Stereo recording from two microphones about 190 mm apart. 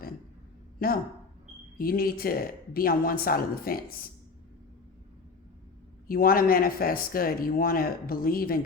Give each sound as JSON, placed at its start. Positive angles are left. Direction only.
{"t": 0.8, "sound": "speech", "side_deg": 50}
{"t": 6.1, "sound": "speech", "side_deg": 50}